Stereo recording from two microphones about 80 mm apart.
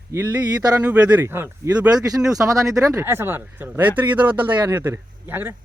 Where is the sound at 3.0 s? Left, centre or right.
Right.